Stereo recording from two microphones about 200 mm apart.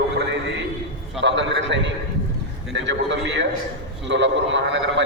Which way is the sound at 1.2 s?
65° right (ahead or behind).